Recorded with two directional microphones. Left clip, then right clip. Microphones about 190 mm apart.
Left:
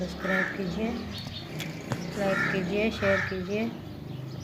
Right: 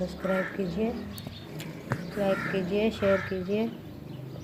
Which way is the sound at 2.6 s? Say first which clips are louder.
Even; 35° right (ahead or behind).